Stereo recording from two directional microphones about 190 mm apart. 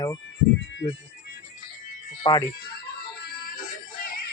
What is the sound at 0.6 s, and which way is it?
Music, 75° left (ahead or behind).